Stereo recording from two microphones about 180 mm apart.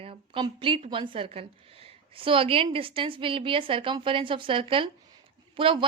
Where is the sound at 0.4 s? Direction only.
30° right (ahead or behind).